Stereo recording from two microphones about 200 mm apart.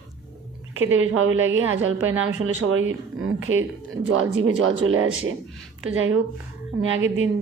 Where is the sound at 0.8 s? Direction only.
85° right.